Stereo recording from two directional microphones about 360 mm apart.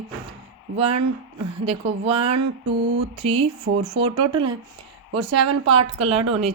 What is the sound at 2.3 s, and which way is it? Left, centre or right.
Mantra, right.